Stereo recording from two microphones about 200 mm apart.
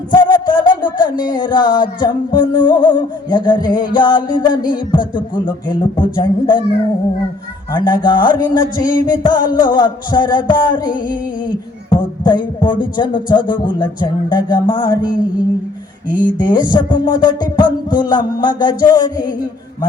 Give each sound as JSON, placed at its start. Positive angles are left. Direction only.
{"t": 0.1, "sound": "a sound", "side_deg": 20}
{"t": 3.9, "sound": "music", "side_deg": 20}
{"t": 7.7, "sound": "music", "side_deg": 20}
{"t": 16.1, "sound": "music", "side_deg": 20}